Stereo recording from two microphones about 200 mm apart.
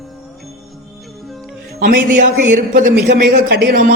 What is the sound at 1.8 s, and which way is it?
Speech, 45° right (ahead or behind).